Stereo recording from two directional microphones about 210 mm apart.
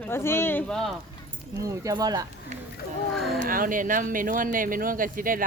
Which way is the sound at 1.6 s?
15° right (ahead or behind).